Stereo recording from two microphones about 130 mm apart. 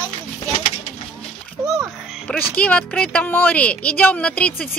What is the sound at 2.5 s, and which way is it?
Speech, 10° left (ahead or behind).